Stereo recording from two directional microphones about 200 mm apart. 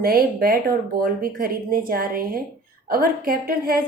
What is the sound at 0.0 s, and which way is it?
Speech, 50° right (ahead or behind).